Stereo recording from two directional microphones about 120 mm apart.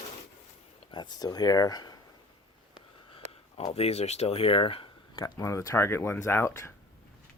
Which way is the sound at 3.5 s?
55° left (ahead or behind).